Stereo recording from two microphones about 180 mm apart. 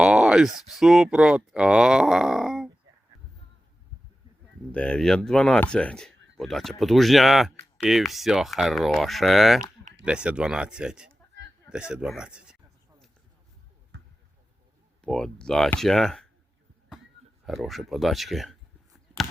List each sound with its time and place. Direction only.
0.0 s speech: 5° right (ahead or behind)
4.7 s speech: 5° left (ahead or behind)
13.9 s basketball bounce: 75° right (ahead or behind)
15.0 s speech: 5° left (ahead or behind)
17.4 s speech: centre (ahead or behind)